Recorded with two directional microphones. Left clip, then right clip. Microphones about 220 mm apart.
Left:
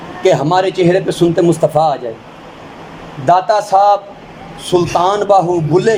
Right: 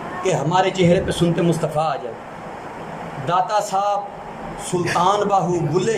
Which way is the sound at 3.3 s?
30° left (ahead or behind).